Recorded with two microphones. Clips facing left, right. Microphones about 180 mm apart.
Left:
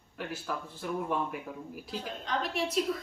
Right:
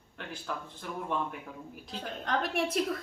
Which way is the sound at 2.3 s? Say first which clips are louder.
Right 2 dB; 55° right (ahead or behind).